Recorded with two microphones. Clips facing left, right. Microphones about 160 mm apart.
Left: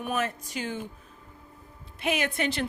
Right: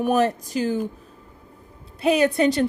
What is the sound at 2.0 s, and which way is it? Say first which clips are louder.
Speech: right 10 dB; 35° right (ahead or behind).